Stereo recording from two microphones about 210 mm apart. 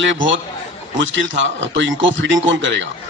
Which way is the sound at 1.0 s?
65° right (ahead or behind).